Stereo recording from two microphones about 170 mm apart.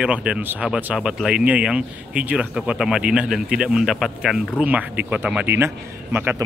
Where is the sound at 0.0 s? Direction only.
5° right (ahead or behind).